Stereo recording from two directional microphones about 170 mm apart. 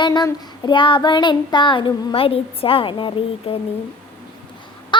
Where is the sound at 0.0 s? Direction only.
25° left (ahead or behind).